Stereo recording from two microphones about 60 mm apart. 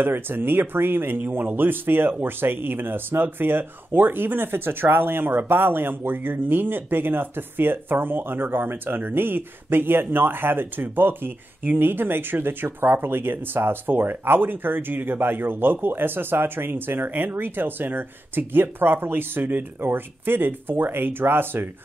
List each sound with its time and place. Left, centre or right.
0.0 s speech: right